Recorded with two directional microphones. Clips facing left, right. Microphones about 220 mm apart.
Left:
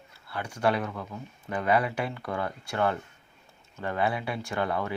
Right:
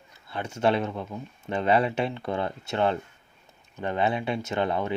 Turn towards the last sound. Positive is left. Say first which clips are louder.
# right 3 dB
turn(degrees=-20)  # may be behind; listen again after turning